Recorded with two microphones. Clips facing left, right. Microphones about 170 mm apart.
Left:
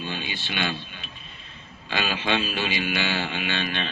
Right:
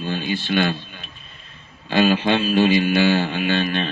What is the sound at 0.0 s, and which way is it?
Speech, 45° right (ahead or behind).